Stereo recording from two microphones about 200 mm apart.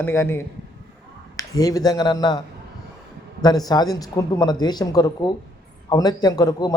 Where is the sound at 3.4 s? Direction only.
20° left (ahead or behind).